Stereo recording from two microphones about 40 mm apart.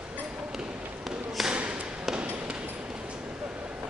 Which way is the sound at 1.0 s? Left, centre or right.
Centre.